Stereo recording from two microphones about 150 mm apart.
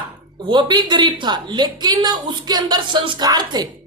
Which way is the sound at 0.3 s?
30° right (ahead or behind).